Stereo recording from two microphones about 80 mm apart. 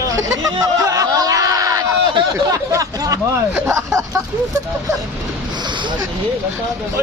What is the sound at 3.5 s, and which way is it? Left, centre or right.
Speech, right.